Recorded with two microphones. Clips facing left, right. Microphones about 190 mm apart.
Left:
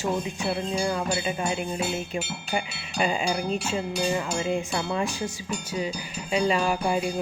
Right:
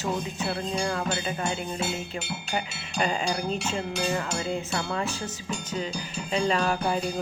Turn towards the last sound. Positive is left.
turn(degrees=10)  # may be behind; listen again after turning